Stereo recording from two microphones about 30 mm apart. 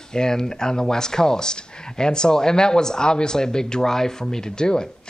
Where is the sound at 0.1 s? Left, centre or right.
Left.